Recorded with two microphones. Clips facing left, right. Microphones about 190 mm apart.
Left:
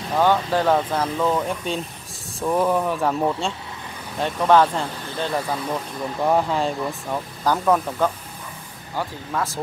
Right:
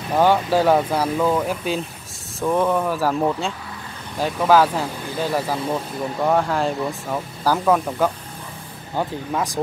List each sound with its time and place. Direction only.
0.1 s speech: 10° right (ahead or behind)
8.9 s speech: 15° right (ahead or behind)